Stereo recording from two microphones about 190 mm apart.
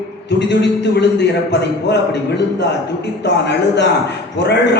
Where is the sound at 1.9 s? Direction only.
65° left (ahead or behind).